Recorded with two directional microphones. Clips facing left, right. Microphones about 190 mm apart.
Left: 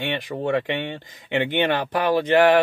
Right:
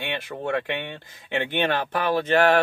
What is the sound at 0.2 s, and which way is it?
Speech, 15° left (ahead or behind).